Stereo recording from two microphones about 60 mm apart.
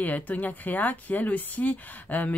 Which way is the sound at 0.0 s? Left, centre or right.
Left.